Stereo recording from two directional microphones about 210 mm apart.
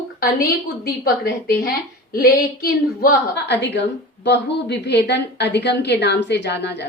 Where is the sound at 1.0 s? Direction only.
45° left (ahead or behind).